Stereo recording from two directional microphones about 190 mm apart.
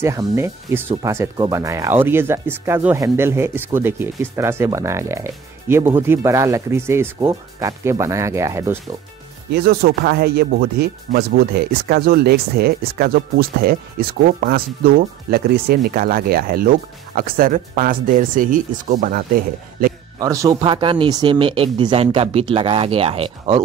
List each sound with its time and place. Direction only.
0.0 s speech: 15° right (ahead or behind)
9.5 s speech: 55° right (ahead or behind)
20.2 s speech: 20° right (ahead or behind)